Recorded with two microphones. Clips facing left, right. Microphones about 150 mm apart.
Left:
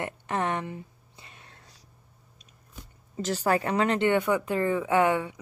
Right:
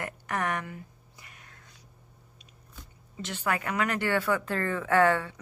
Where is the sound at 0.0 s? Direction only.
25° left (ahead or behind).